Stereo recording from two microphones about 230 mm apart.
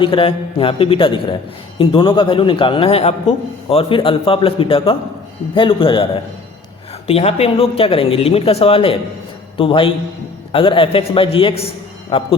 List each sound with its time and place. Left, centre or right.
0.0 s speech: left
7.1 s speech: left